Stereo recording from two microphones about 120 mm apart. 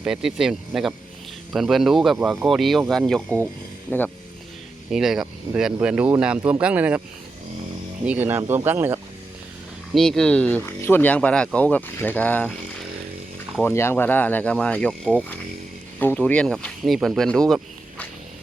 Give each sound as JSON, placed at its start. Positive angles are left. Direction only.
{"t": 0.0, "sound": "speech", "side_deg": -5}
{"t": 2.1, "sound": "speech", "side_deg": -15}
{"t": 2.5, "sound": "speech", "side_deg": 0}
{"t": 3.8, "sound": "speech", "side_deg": 15}
{"t": 4.9, "sound": "speech", "side_deg": -5}
{"t": 8.0, "sound": "speech", "side_deg": -15}
{"t": 9.9, "sound": "speech", "side_deg": 5}
{"t": 13.7, "sound": "speech", "side_deg": 20}